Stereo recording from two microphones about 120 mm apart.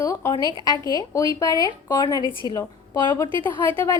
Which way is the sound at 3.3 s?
45° right (ahead or behind).